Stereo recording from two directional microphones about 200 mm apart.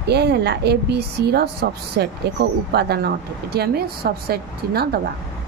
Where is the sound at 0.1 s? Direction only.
55° right (ahead or behind).